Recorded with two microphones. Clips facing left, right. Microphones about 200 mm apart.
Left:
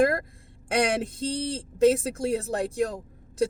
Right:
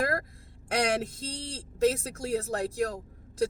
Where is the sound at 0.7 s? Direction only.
25° left (ahead or behind).